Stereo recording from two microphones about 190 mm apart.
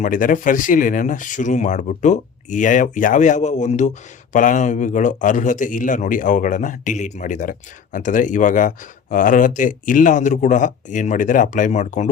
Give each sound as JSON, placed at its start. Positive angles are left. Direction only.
{"t": 0.0, "sound": "speech", "side_deg": 45}